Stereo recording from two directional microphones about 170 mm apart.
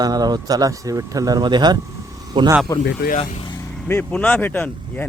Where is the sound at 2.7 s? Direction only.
20° left (ahead or behind).